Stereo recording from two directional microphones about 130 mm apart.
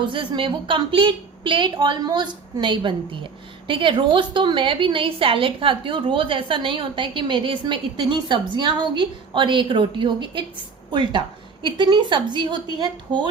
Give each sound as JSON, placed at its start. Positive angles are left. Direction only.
{"t": 0.0, "sound": "a woman's voice", "side_deg": -40}
{"t": 11.6, "sound": "a woman's voice", "side_deg": -40}